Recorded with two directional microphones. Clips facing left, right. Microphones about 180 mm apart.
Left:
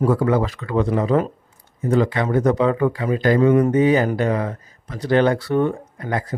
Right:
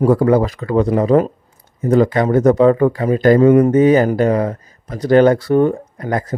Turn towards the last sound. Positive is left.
turn(degrees=-45)  # may be behind; listen again after turning